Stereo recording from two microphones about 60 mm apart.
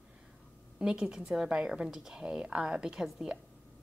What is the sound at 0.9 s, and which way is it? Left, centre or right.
A woman's voice, centre.